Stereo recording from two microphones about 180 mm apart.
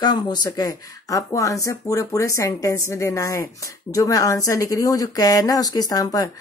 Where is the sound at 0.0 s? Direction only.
25° left (ahead or behind).